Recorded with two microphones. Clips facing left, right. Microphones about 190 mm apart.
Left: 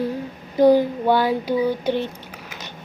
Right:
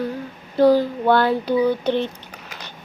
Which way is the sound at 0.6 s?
15° left (ahead or behind).